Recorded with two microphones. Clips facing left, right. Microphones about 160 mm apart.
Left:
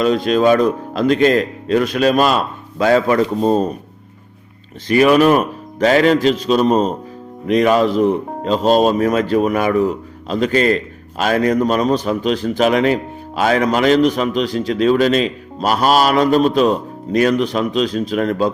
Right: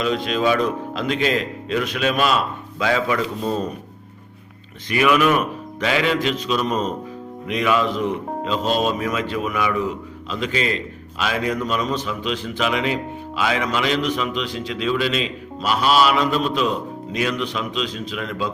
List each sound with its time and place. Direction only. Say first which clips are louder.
0.0 s speech: left 7 dB; 40° left (ahead or behind)
4.9 s speech: left 6 dB; 35° left (ahead or behind)